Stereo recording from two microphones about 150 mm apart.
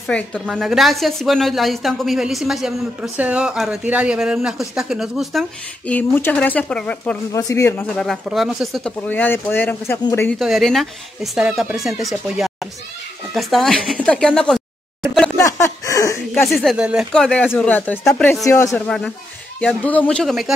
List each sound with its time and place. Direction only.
0.0 s a woman's voice: 5° left (ahead or behind)
5.9 s speech: 10° left (ahead or behind)
7.3 s a man's voice: 20° left (ahead or behind)
7.9 s a woman's voice: centre (ahead or behind)
9.0 s speech: 10° left (ahead or behind)
10.4 s a woman's voice: centre (ahead or behind)
15.5 s a sound: 20° left (ahead or behind)
16.4 s a woman's voice: centre (ahead or behind)
17.1 s a woman's voice: 5° left (ahead or behind)
18.4 s a man's voice: 20° left (ahead or behind)
18.9 s a woman's voice: 5° left (ahead or behind)